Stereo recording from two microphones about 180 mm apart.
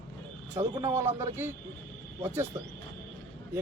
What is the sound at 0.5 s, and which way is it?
Speech, 15° right (ahead or behind).